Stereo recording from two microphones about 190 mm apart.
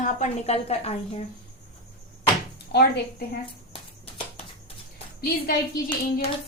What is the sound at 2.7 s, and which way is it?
Speech, 60° left (ahead or behind).